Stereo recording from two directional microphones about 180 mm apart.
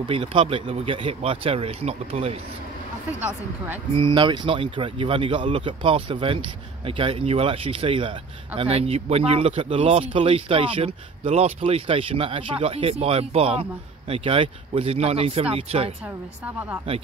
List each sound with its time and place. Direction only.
0.1 s speech: 30° right (ahead or behind)
3.2 s speech: 10° right (ahead or behind)
3.9 s speech: 25° right (ahead or behind)
16.4 s speech: 10° right (ahead or behind)